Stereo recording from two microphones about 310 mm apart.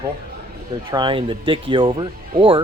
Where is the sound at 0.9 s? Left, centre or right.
Centre.